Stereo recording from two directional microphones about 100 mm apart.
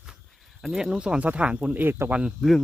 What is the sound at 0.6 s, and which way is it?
Speech, 5° right (ahead or behind).